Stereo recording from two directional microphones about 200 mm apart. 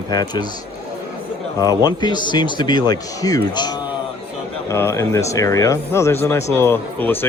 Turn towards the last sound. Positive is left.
turn(degrees=10)  # may be behind; listen again after turning